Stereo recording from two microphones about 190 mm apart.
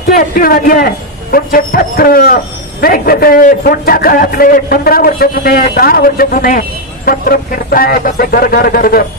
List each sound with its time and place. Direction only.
0.1 s a man's voice: 50° left (ahead or behind)